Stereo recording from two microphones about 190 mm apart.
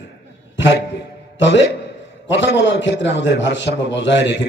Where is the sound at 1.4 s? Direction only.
70° left (ahead or behind).